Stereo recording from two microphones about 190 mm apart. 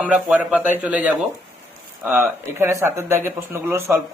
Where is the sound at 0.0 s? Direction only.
5° right (ahead or behind).